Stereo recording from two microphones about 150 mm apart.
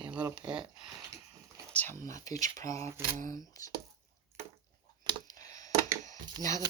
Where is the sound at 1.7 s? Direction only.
15° left (ahead or behind).